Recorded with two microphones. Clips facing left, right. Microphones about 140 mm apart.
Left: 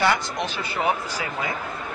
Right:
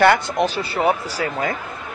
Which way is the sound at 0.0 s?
60° right (ahead or behind).